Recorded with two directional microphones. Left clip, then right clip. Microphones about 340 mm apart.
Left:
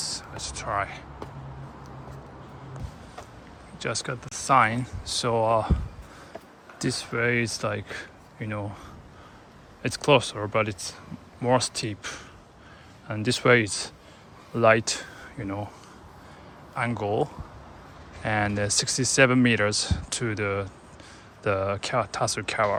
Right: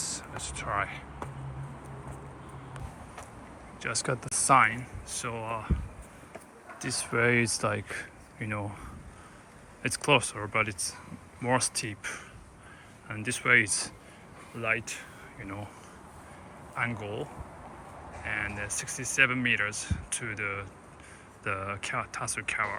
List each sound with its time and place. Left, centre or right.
0.0 s speech: centre
3.8 s speech: centre
6.7 s speech: centre
9.8 s speech: centre
14.6 s speech: centre
16.7 s speech: centre
18.4 s speech: centre